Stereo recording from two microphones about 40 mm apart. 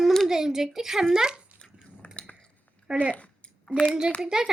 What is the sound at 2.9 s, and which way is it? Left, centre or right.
Speech, right.